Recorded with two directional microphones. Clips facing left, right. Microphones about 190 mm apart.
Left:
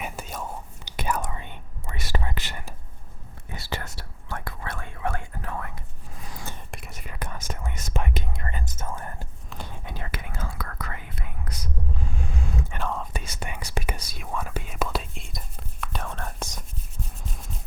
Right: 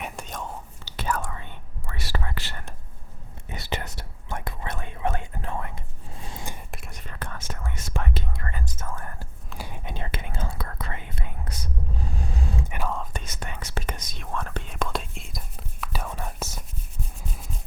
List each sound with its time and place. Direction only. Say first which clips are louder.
0.0 s whispering: left 1 dB; 5° left (ahead or behind)
3.5 s whispering: right 2 dB; 20° right (ahead or behind)
6.1 s a sound: right 2 dB; 25° right (ahead or behind)
6.7 s whispering: even; centre (ahead or behind)
7.0 s whispering: left 2 dB; 10° left (ahead or behind)
9.5 s whispering: right 2 dB; 10° right (ahead or behind); by 12.6 s 35° right (ahead or behind)
12.9 s whispering: even; 5° left (ahead or behind)